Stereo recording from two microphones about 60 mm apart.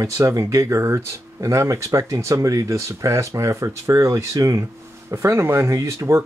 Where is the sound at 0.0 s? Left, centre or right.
Right.